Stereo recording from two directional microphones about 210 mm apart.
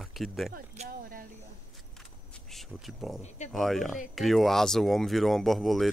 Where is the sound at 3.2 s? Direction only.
35° left (ahead or behind).